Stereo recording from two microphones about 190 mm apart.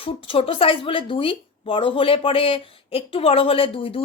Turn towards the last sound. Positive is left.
turn(degrees=30)  # may be behind; listen again after turning